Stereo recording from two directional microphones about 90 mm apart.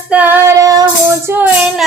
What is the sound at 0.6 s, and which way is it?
Music, 40° right (ahead or behind).